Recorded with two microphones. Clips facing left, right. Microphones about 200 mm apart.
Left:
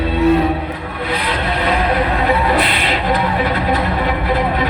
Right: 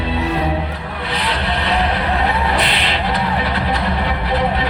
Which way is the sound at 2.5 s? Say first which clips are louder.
Left 3 dB; 45° left (ahead or behind).